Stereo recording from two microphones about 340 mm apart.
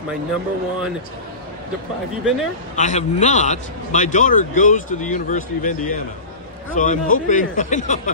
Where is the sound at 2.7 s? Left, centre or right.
Centre.